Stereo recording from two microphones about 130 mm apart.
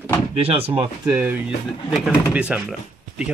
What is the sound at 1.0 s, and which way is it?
Speech, 15° right (ahead or behind).